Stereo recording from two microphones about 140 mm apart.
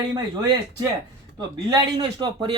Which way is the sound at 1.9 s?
35° right (ahead or behind).